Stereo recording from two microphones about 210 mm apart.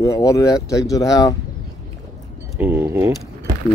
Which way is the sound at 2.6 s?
10° right (ahead or behind).